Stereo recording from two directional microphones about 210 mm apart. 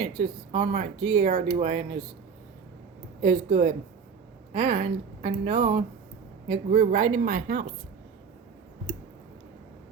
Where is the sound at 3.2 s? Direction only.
25° right (ahead or behind).